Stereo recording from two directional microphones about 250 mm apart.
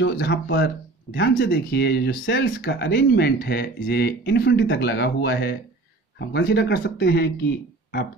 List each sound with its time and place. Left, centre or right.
0.0 s speech: left